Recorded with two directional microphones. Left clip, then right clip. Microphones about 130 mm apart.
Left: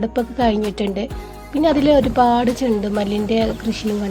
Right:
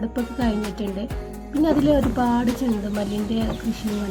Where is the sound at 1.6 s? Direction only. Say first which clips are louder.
Left 5 dB; 35° left (ahead or behind).